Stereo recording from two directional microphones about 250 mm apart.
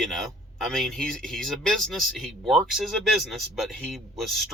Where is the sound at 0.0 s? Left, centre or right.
Centre.